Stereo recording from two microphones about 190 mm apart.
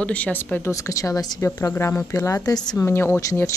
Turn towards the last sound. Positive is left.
turn(degrees=10)  # may be behind; listen again after turning